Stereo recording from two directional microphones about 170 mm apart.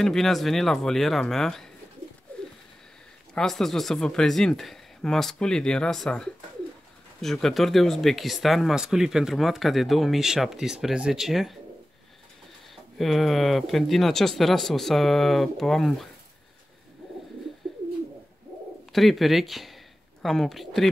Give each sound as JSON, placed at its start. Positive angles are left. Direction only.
{"t": 0.0, "sound": "speech", "side_deg": 0}
{"t": 2.3, "sound": "pigeon", "side_deg": 10}
{"t": 3.3, "sound": "speech", "side_deg": 0}
{"t": 12.9, "sound": "speech", "side_deg": 0}
{"t": 18.9, "sound": "speech", "side_deg": 0}